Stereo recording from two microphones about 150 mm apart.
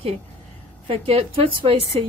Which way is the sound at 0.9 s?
40° right (ahead or behind).